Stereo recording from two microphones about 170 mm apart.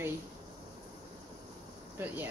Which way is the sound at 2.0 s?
10° right (ahead or behind).